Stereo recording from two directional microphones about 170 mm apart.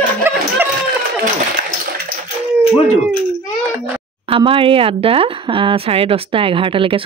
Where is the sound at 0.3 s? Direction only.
15° right (ahead or behind).